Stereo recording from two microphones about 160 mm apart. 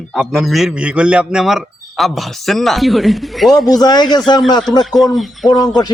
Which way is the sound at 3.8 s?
25° left (ahead or behind).